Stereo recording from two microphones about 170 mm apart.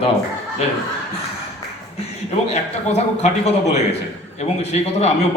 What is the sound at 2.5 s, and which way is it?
A man's voice, 40° left (ahead or behind).